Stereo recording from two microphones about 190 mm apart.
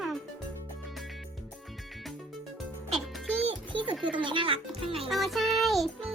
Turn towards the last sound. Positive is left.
turn(degrees=0)  # may be behind; listen again after turning